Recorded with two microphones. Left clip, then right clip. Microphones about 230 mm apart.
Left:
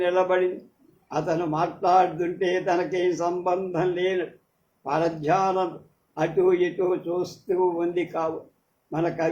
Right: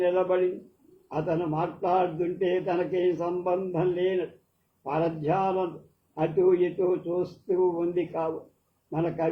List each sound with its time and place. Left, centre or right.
0.0 s a man's voice: left